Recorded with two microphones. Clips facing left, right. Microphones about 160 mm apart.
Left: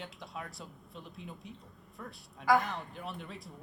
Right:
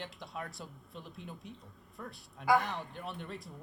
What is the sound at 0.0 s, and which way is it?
Speech, centre (ahead or behind).